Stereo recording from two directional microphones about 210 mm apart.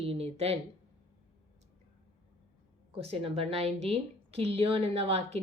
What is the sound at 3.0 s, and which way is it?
A woman's voice, 30° right (ahead or behind).